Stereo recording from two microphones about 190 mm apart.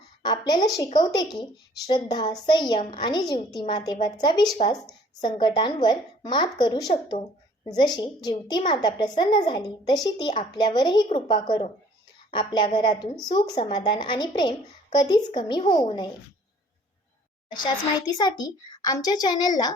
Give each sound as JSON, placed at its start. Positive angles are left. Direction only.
{"t": 0.2, "sound": "a sound", "side_deg": 20}
{"t": 0.9, "sound": "a woman's voice", "side_deg": 20}
{"t": 17.5, "sound": "a woman's voice", "side_deg": 20}